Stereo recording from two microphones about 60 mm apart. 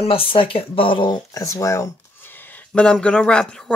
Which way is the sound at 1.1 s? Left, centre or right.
Left.